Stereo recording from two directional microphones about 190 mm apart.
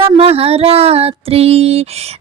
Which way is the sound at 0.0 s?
30° right (ahead or behind).